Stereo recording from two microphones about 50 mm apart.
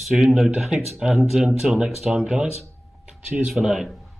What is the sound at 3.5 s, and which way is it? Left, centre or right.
Speech, centre.